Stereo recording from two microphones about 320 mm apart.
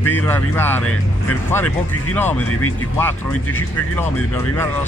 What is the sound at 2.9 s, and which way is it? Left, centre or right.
Speech, centre.